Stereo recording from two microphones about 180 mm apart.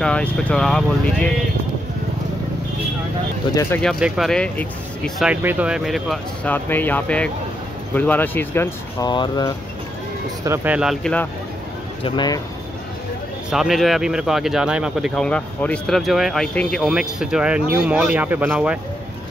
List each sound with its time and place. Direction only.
0.0 s speech: 5° left (ahead or behind)
3.8 s speech: centre (ahead or behind)
5.3 s speech: 10° right (ahead or behind)
6.5 s speech: 10° left (ahead or behind)
9.0 s speech: 25° left (ahead or behind)
10.4 s speech: 10° right (ahead or behind)
12.0 s speech: 25° left (ahead or behind)
13.5 s speech: centre (ahead or behind)